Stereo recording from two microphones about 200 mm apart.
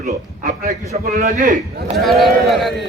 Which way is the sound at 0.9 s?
40° right (ahead or behind).